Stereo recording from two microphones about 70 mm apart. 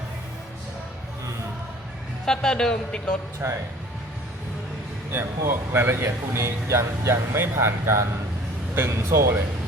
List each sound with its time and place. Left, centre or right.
2.2 s a man's voice: centre
3.4 s speech: right
5.7 s speech: right